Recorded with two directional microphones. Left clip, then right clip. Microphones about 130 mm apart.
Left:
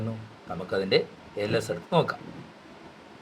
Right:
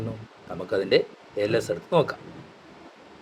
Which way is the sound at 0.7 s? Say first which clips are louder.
Right 3 dB; 30° right (ahead or behind).